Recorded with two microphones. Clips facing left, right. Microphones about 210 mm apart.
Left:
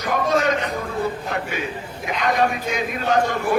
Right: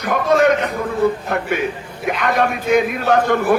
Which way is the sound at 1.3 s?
55° right (ahead or behind).